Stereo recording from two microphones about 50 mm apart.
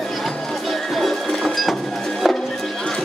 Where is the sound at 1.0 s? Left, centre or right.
Centre.